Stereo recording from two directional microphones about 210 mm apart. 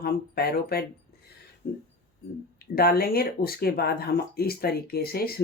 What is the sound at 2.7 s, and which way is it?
Speech, 45° left (ahead or behind).